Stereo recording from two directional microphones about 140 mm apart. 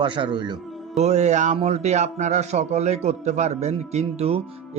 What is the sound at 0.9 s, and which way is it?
A man's voice, 55° right (ahead or behind).